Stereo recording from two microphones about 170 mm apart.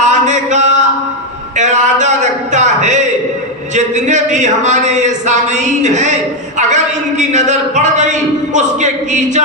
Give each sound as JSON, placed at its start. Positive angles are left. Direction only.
{"t": 0.0, "sound": "mantra", "side_deg": -45}
{"t": 1.5, "sound": "a sound", "side_deg": -45}
{"t": 3.8, "sound": "a man's voice", "side_deg": -45}